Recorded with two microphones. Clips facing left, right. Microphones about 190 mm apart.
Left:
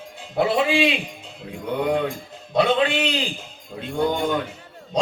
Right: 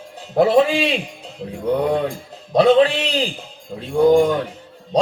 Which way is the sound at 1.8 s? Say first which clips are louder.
Even; 35° right (ahead or behind).